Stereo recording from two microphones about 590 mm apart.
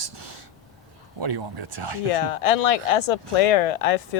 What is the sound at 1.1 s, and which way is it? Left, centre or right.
Speech, right.